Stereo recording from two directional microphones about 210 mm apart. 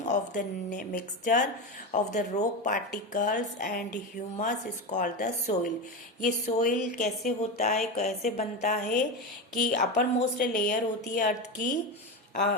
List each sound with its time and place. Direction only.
0.0 s a woman's voice: 35° left (ahead or behind)